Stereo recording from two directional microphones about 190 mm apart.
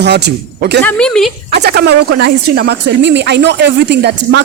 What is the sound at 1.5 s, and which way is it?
Speech, 60° right (ahead or behind).